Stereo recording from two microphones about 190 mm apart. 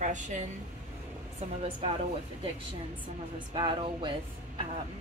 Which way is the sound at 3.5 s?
25° right (ahead or behind).